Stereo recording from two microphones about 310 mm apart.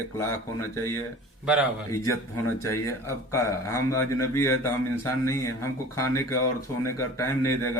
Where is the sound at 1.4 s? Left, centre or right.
Centre.